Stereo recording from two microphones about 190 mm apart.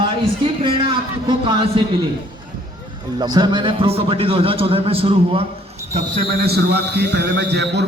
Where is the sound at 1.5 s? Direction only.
25° right (ahead or behind).